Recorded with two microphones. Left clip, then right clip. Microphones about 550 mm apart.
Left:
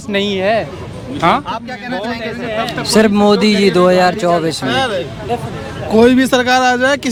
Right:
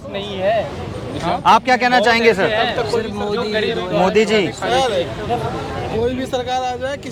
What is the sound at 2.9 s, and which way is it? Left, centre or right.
Speech, left.